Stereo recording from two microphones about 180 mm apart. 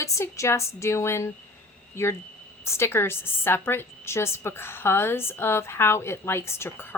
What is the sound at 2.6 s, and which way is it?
A woman's voice, 15° left (ahead or behind).